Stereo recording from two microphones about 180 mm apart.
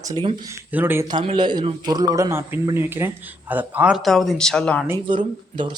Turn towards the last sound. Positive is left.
turn(degrees=-25)  # may be behind; listen again after turning